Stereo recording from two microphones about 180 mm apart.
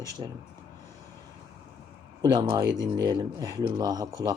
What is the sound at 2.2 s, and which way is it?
Speech, 20° right (ahead or behind).